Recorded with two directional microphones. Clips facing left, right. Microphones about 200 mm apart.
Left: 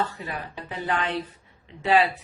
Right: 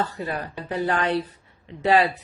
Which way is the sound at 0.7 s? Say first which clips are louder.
Right 5 dB; 40° right (ahead or behind).